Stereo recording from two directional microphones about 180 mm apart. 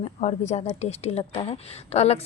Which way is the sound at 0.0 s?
40° left (ahead or behind).